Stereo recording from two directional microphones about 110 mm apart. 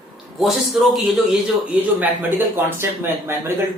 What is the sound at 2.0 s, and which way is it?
Speech, 20° right (ahead or behind).